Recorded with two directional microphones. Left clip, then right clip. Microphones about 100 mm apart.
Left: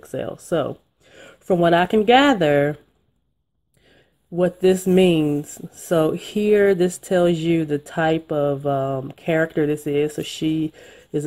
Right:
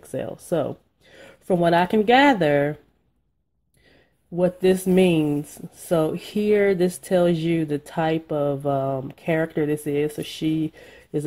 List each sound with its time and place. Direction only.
0.0 s speech: 10° left (ahead or behind)
4.4 s speech: 20° left (ahead or behind)